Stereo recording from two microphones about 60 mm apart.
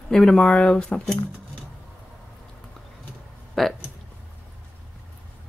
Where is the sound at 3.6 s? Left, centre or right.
Centre.